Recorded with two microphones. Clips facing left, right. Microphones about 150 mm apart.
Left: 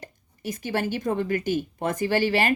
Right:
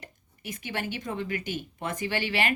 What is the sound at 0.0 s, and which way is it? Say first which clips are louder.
Speech: left 8 dB; 40° left (ahead or behind).